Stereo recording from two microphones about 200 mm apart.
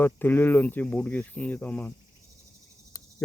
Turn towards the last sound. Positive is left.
turn(degrees=15)  # may be behind; listen again after turning